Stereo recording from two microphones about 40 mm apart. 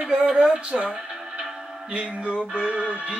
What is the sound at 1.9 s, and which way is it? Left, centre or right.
Speech, right.